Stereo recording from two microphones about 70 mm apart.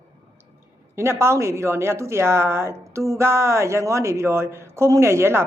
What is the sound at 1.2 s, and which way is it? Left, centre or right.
A woman's voice, right.